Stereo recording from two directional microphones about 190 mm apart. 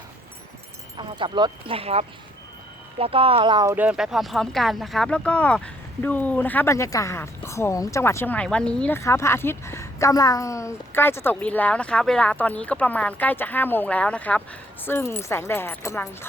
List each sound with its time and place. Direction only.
0.9 s speech: 25° right (ahead or behind); by 16.0 s 15° left (ahead or behind)